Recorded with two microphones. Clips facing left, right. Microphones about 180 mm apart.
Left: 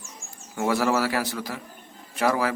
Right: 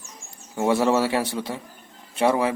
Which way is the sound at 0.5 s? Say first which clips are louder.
Right 3 dB; 25° right (ahead or behind).